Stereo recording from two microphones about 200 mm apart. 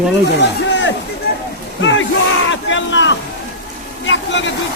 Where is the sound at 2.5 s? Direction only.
65° left (ahead or behind).